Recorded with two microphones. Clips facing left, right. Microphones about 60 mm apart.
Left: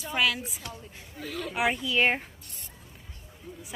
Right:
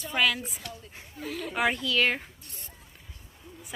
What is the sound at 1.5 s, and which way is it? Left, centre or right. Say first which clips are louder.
Speech: even; centre.